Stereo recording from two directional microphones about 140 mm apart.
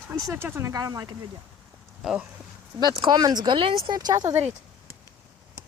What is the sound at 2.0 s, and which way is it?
Speech, 5° right (ahead or behind).